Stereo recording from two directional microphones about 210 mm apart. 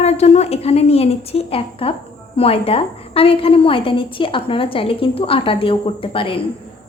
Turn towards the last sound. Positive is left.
turn(degrees=25)  # may be behind; listen again after turning